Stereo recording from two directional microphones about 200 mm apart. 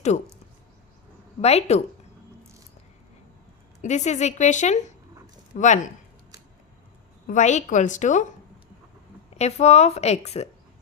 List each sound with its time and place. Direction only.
1.4 s a woman's voice: 30° left (ahead or behind)
3.8 s a woman's voice: 35° left (ahead or behind)
7.3 s a woman's voice: 35° left (ahead or behind)
9.4 s a woman's voice: 35° left (ahead or behind)